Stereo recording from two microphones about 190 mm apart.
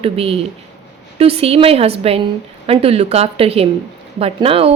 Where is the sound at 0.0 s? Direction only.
30° right (ahead or behind).